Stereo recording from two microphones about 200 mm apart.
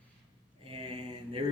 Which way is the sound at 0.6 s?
25° right (ahead or behind).